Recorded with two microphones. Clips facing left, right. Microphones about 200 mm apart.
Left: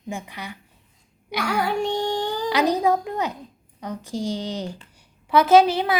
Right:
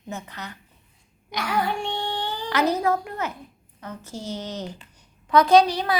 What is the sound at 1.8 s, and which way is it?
Child singing, 40° left (ahead or behind).